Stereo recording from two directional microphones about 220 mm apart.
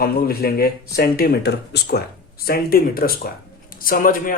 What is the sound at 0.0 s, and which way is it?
Speech, 45° left (ahead or behind).